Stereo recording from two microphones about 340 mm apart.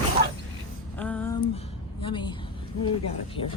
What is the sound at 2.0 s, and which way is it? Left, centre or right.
Speech, centre.